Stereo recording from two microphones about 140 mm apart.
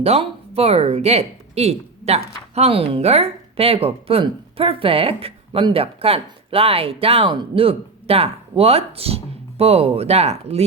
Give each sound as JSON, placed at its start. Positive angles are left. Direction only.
{"t": 0.0, "sound": "speech", "side_deg": -45}